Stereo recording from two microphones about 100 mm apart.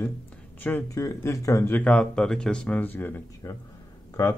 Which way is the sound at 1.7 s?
15° left (ahead or behind).